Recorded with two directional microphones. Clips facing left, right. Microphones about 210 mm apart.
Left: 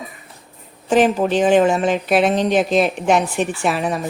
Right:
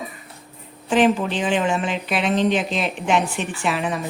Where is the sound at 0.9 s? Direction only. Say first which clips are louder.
Left 3 dB; 40° left (ahead or behind).